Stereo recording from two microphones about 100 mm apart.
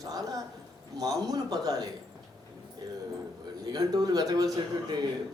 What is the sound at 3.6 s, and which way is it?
Speech, 40° right (ahead or behind).